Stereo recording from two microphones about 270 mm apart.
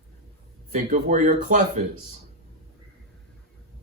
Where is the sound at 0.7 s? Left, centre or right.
Right.